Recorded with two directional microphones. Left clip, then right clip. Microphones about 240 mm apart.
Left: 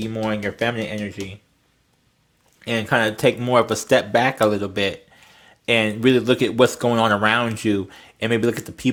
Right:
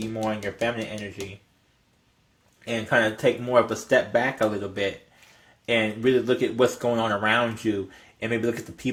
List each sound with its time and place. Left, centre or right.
0.1 s speech: left
2.6 s speech: left